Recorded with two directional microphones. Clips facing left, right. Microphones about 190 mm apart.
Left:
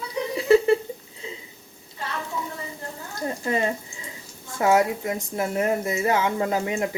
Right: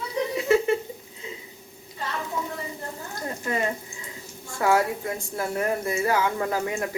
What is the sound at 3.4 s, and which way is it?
A woman's voice, 25° left (ahead or behind).